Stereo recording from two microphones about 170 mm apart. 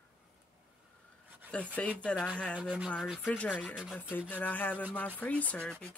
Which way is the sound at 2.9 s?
Centre (ahead or behind).